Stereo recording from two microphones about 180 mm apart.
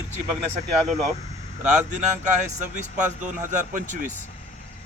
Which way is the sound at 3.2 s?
45° right (ahead or behind).